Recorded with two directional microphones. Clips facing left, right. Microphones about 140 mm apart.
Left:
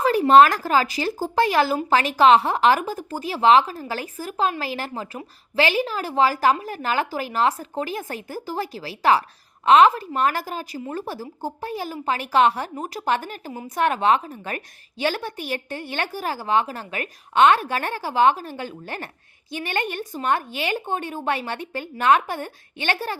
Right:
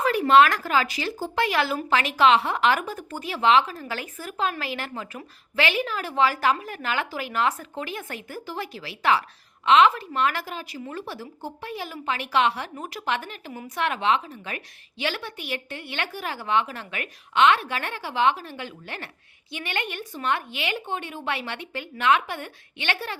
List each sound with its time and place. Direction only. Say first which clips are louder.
0.0 s a woman's voice: left 4 dB; 35° left (ahead or behind)